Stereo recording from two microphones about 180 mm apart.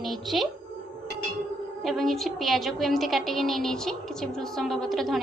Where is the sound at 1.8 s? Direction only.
Centre (ahead or behind).